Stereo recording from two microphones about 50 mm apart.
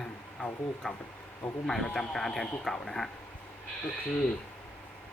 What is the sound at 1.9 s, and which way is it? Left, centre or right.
Speech, centre.